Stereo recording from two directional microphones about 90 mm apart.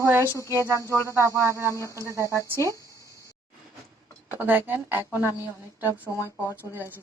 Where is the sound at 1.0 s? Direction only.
35° right (ahead or behind).